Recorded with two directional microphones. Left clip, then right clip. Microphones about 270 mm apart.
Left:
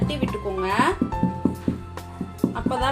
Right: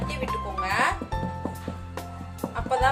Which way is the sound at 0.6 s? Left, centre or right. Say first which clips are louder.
Left 2 dB; centre.